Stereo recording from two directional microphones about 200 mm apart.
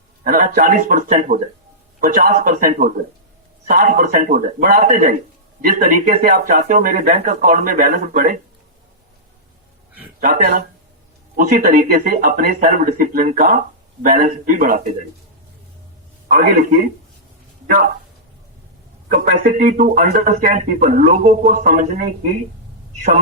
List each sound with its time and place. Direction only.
0.3 s speech: 45° right (ahead or behind)
10.2 s speech: 40° right (ahead or behind)
16.3 s speech: 45° right (ahead or behind)
19.0 s speech: 40° right (ahead or behind)